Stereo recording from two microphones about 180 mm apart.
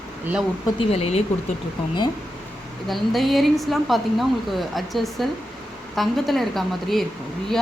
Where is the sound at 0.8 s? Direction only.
35° left (ahead or behind).